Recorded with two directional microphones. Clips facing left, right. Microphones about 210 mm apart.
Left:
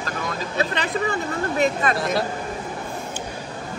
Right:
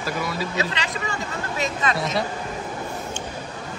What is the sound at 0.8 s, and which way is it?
Speech, 55° left (ahead or behind).